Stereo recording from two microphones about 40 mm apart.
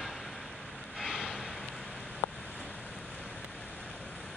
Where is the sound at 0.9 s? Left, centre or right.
Centre.